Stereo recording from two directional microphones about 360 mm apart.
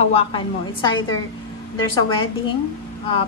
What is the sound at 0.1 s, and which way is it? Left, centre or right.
Speech, centre.